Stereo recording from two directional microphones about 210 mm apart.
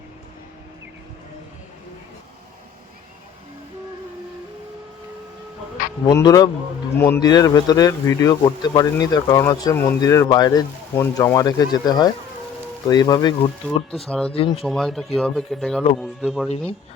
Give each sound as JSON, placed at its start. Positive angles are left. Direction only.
{"t": 6.1, "sound": "a man's voice", "side_deg": 20}
{"t": 13.9, "sound": "speech", "side_deg": 5}
{"t": 14.3, "sound": "a man's voice", "side_deg": 25}
{"t": 14.6, "sound": "speech", "side_deg": 0}